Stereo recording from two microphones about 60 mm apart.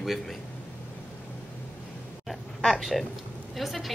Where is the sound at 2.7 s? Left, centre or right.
Centre.